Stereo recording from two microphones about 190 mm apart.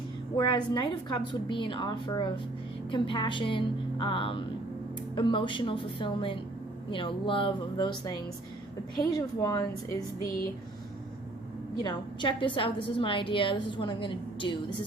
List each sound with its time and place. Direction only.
0.3 s a woman's voice: 20° left (ahead or behind)
11.8 s a woman's voice: 25° left (ahead or behind)